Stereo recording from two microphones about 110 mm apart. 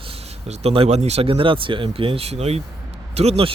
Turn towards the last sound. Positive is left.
turn(degrees=-65)  # may be behind; listen again after turning